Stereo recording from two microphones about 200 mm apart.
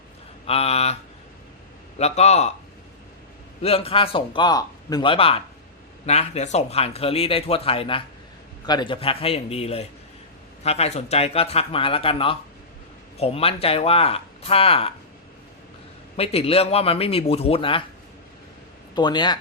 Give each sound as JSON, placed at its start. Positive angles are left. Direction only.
{"t": 0.4, "sound": "speech", "side_deg": 30}
{"t": 2.0, "sound": "a man's voice", "side_deg": 30}
{"t": 3.6, "sound": "a man's voice", "side_deg": 30}
{"t": 16.1, "sound": "a man's voice", "side_deg": 30}
{"t": 18.9, "sound": "a man's voice", "side_deg": 20}